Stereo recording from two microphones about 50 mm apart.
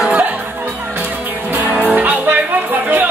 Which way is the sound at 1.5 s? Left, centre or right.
Right.